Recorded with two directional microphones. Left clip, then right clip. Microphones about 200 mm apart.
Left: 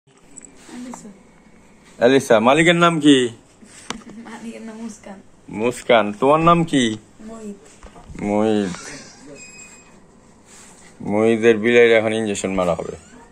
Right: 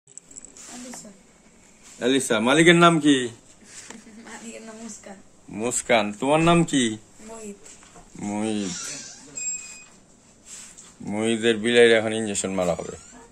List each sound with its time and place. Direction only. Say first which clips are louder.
2.0 s speech: left 9 dB; 25° left (ahead or behind)
2.6 s speech: left 1 dB; 5° right (ahead or behind)
5.5 s speech: left 6 dB; 5° right (ahead or behind)
8.2 s speech: left 10 dB; 10° left (ahead or behind)
11.1 s speech: left 8 dB; centre (ahead or behind); by 13.0 s 15° right (ahead or behind)